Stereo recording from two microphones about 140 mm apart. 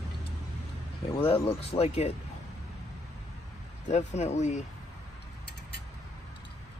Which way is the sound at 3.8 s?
55° left (ahead or behind).